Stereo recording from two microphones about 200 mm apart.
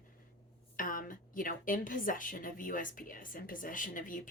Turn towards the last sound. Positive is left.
turn(degrees=40)  # may be behind; listen again after turning